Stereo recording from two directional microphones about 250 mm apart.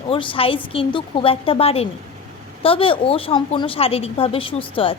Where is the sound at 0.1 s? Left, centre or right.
Left.